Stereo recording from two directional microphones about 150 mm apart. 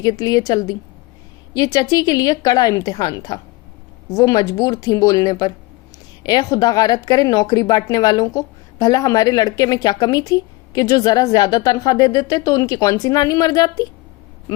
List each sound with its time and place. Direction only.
0.0 s a woman's voice: 25° left (ahead or behind)